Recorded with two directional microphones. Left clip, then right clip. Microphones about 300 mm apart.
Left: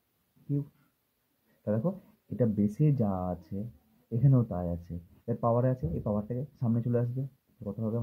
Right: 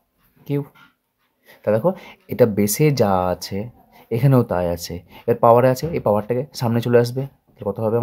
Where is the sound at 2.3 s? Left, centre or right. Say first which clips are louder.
Right 14 dB; right.